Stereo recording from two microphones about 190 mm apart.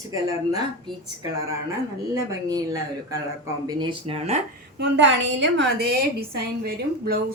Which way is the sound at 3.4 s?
20° right (ahead or behind).